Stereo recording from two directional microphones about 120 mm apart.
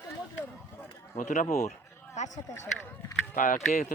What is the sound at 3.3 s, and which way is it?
Speech, 90° left.